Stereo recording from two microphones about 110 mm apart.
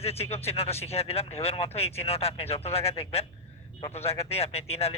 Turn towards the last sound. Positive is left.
turn(degrees=65)  # may be behind; listen again after turning